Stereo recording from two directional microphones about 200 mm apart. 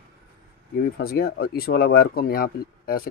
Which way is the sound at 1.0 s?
50° left (ahead or behind).